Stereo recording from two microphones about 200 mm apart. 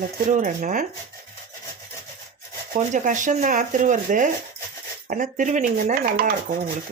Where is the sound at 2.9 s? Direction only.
40° right (ahead or behind).